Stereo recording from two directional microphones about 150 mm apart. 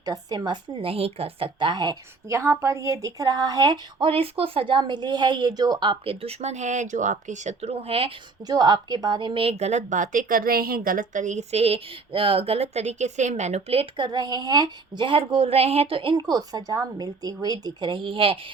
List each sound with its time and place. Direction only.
0.0 s a woman's voice: 25° right (ahead or behind); by 8.1 s 40° right (ahead or behind)
8.4 s a woman's voice: 25° right (ahead or behind)